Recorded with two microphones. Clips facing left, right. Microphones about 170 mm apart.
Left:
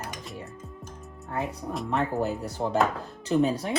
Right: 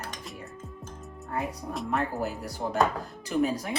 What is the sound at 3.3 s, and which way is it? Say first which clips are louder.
Speech: left 3 dB; 30° left (ahead or behind).